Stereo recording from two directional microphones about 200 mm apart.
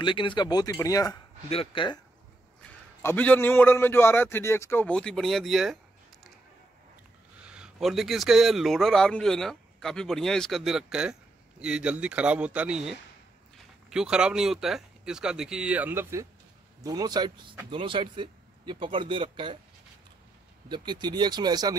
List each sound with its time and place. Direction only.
0.0 s speech: 25° left (ahead or behind)
3.0 s a man's voice: 10° left (ahead or behind)
7.4 s speech: 5° right (ahead or behind); by 19.6 s 25° right (ahead or behind)
20.6 s speech: 20° right (ahead or behind)